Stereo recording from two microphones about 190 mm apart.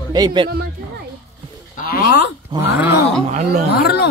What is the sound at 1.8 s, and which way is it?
Speech, 50° left (ahead or behind).